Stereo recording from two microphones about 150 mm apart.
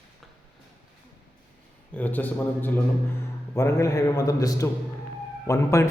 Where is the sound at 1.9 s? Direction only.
10° left (ahead or behind).